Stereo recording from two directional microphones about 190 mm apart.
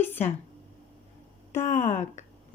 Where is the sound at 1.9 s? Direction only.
40° left (ahead or behind).